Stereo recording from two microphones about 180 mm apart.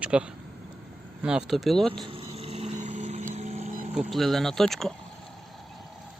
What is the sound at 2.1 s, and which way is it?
Vehicle, 35° right (ahead or behind).